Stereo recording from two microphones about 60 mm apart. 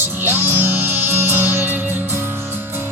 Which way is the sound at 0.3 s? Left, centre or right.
Right.